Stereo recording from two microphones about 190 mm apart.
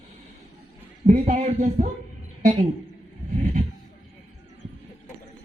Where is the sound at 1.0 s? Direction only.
40° right (ahead or behind).